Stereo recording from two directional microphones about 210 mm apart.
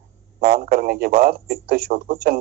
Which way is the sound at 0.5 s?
45° right (ahead or behind).